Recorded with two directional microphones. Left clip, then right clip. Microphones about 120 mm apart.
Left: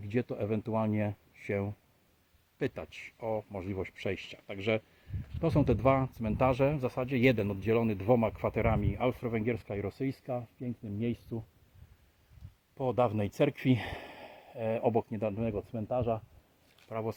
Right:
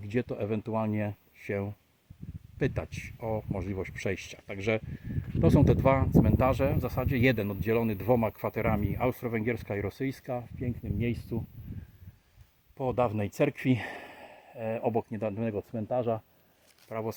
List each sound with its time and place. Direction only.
0.0 s speech: 25° right (ahead or behind)
12.7 s speech: 30° right (ahead or behind); by 15.0 s 10° right (ahead or behind)
15.1 s speech: 30° right (ahead or behind); by 16.2 s 55° right (ahead or behind)
16.9 s speech: 30° right (ahead or behind)